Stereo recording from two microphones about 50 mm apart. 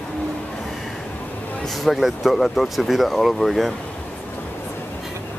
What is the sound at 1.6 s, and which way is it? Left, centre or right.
Speech, centre.